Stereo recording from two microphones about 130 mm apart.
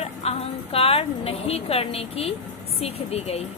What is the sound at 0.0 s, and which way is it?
A woman's voice, 50° left (ahead or behind).